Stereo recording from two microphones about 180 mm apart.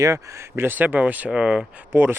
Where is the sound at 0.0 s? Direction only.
15° right (ahead or behind).